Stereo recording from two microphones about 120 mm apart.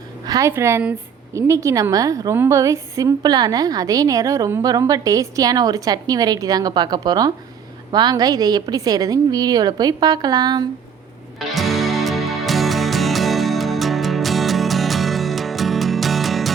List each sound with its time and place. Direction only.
0.3 s a woman's voice: 25° right (ahead or behind)
11.3 s music: centre (ahead or behind)